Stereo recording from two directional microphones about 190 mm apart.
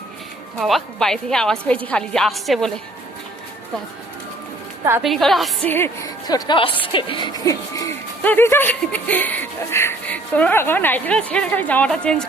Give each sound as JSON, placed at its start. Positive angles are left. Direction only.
{"t": 0.6, "sound": "a woman's voice", "side_deg": 0}
{"t": 5.0, "sound": "a woman's voice", "side_deg": 0}
{"t": 5.7, "sound": "a woman's voice", "side_deg": 15}
{"t": 8.2, "sound": "speech", "side_deg": 10}